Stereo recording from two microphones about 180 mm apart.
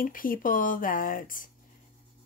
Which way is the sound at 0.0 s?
50° left (ahead or behind).